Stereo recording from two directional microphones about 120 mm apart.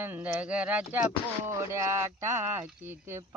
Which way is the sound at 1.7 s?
25° right (ahead or behind).